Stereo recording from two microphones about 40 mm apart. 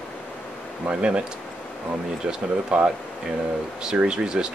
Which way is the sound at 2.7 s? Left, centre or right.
Right.